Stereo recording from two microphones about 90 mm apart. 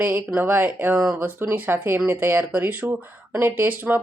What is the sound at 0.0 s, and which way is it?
Speech, 20° right (ahead or behind).